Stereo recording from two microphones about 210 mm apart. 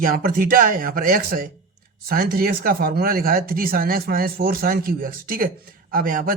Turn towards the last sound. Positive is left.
turn(degrees=-40)  # may be behind; listen again after turning